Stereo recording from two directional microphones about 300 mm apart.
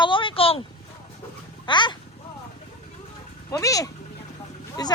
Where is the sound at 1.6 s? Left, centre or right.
Centre.